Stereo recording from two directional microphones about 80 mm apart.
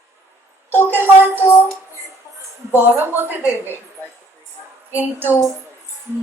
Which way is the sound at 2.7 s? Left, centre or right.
Right.